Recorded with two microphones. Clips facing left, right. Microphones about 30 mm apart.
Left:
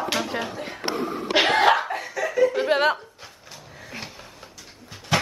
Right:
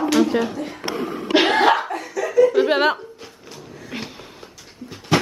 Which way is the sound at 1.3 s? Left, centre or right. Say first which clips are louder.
Right 3 dB; centre.